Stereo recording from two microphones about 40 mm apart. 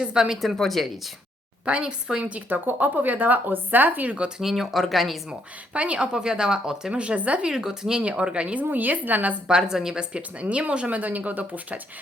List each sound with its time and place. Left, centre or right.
0.0 s speech: centre
0.5 s speech: centre
1.6 s speech: right
2.2 s speech: right
4.4 s speech: centre
5.7 s a woman's voice: right
6.1 s speech: centre
6.9 s speech: right
7.5 s speech: centre
8.6 s speech: right
9.5 s a woman's voice: centre; by 11.8 s right